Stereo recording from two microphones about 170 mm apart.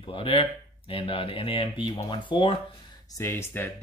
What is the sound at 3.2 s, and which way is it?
Speech, 15° left (ahead or behind).